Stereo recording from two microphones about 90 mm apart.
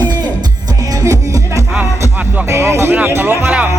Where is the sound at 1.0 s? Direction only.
35° right (ahead or behind).